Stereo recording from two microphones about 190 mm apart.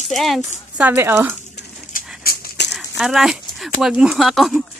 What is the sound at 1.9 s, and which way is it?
Dog, 55° left (ahead or behind).